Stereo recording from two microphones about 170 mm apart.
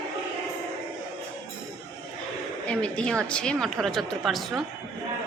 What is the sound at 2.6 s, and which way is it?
A woman's voice, 5° left (ahead or behind).